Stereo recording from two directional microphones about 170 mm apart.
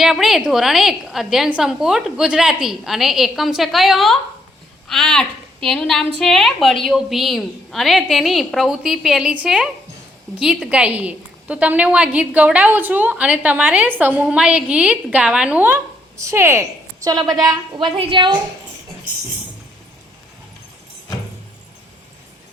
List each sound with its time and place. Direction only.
0.0 s a woman's voice: 5° right (ahead or behind); by 18.3 s 30° right (ahead or behind)